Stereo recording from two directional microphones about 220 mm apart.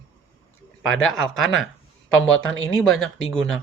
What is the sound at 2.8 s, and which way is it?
Speech, centre (ahead or behind).